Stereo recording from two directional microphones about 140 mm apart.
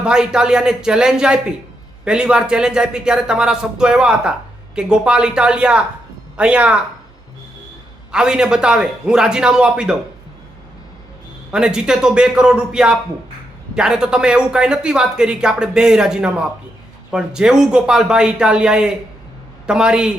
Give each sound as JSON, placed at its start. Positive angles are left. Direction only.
{"t": 0.0, "sound": "speech", "side_deg": -5}
{"t": 8.1, "sound": "speech", "side_deg": -5}
{"t": 11.5, "sound": "speech", "side_deg": -5}